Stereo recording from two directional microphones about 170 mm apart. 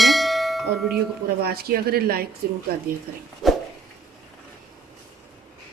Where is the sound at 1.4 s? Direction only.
65° right (ahead or behind).